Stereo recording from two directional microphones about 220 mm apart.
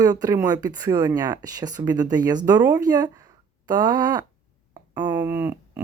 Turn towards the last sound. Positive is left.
turn(degrees=-10)  # may be behind; listen again after turning